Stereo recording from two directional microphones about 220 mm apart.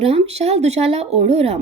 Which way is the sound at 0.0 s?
25° right (ahead or behind).